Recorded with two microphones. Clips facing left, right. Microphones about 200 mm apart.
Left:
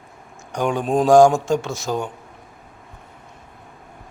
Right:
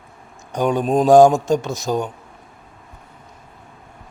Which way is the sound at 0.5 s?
20° right (ahead or behind).